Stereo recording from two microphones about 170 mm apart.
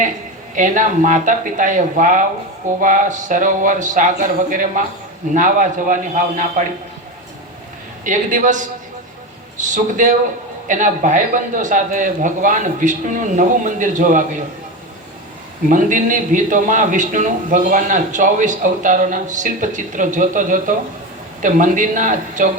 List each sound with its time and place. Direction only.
0.5 s a man's voice: 50° right (ahead or behind)
8.0 s a man's voice: 45° right (ahead or behind)
15.7 s a man's voice: 50° right (ahead or behind)